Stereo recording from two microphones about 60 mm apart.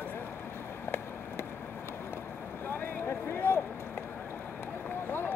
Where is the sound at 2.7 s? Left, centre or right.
Left.